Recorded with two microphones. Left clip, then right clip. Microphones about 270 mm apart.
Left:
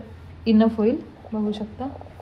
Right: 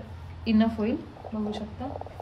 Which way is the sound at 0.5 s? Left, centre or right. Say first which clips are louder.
Left 7 dB; centre.